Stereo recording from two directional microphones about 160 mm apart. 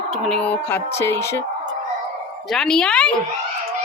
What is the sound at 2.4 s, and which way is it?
Speech, centre (ahead or behind).